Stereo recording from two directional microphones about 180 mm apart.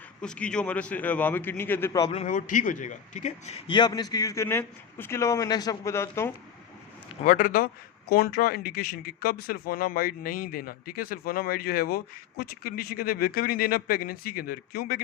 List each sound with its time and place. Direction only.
0.2 s a man's voice: 5° left (ahead or behind)
2.0 s a man's voice: 40° left (ahead or behind); by 6.3 s 15° left (ahead or behind)
7.3 s a man's voice: 50° left (ahead or behind)